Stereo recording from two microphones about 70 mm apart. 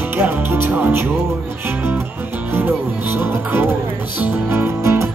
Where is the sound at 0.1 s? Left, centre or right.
Right.